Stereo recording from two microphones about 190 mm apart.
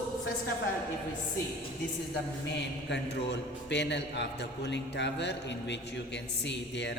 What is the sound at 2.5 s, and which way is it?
A man's voice, 65° left (ahead or behind).